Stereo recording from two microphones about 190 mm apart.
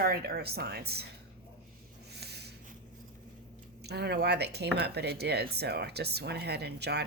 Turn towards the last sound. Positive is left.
turn(degrees=-60)  # may be behind; listen again after turning